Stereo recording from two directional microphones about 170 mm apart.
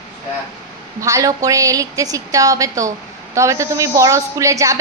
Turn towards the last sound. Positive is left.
turn(degrees=-20)  # may be behind; listen again after turning